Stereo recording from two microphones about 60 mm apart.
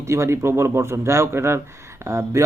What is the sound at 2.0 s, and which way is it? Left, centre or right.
Speech, right.